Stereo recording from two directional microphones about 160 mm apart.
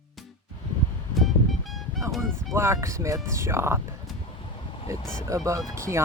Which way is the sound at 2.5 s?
15° right (ahead or behind).